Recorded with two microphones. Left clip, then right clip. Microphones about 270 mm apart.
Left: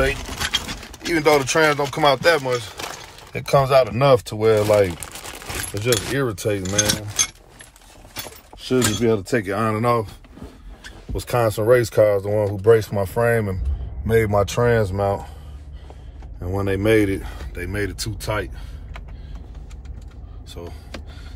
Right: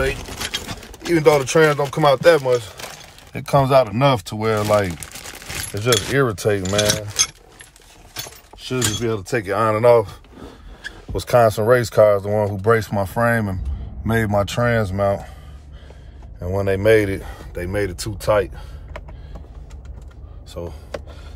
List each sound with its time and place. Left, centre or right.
1.1 s speech: centre
6.1 s speech: centre
8.6 s speech: centre
11.1 s speech: centre
16.3 s speech: centre